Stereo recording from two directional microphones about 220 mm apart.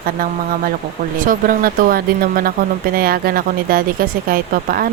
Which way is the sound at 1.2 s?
40° right (ahead or behind).